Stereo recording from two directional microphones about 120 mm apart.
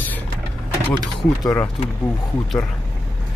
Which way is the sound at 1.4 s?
25° left (ahead or behind).